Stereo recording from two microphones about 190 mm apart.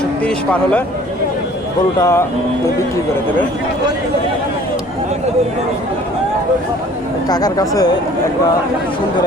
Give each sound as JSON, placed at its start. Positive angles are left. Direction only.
{"t": 2.0, "sound": "speech", "side_deg": 15}
{"t": 7.3, "sound": "speech", "side_deg": 20}